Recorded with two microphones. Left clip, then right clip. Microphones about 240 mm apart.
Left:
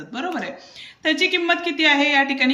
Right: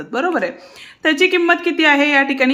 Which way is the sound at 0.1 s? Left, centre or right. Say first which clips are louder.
Right 9 dB; centre.